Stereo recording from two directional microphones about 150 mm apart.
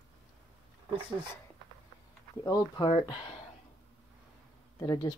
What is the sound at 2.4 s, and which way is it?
Speech, 25° left (ahead or behind).